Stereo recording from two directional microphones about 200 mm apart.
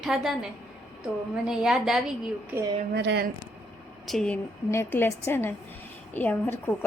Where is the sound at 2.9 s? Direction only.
60° right (ahead or behind).